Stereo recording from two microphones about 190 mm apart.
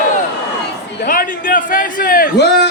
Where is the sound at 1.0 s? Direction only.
45° left (ahead or behind); by 2.7 s 65° left (ahead or behind).